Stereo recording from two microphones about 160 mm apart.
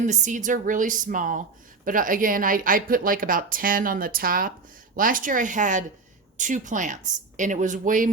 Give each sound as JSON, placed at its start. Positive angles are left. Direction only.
{"t": 0.0, "sound": "a woman's voice", "side_deg": -50}